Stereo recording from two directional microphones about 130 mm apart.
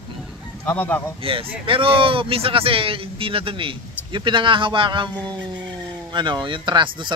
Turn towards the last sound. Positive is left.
turn(degrees=-35)  # may be behind; listen again after turning